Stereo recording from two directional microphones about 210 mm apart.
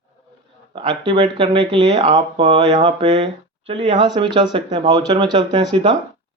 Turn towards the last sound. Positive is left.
turn(degrees=-20)  # may be behind; listen again after turning